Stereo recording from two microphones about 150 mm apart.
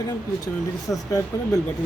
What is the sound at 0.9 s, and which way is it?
Speech, 20° left (ahead or behind).